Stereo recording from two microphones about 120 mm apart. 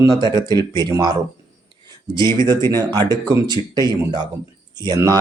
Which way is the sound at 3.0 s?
30° right (ahead or behind).